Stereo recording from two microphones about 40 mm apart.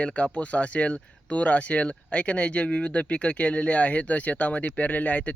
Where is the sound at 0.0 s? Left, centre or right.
Left.